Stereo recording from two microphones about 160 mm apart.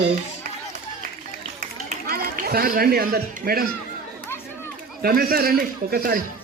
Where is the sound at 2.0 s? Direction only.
70° right (ahead or behind).